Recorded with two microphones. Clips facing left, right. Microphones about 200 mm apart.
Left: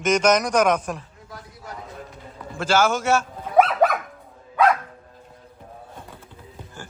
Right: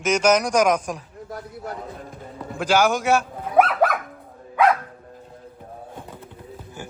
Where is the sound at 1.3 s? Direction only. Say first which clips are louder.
Right 6 dB; 60° right (ahead or behind).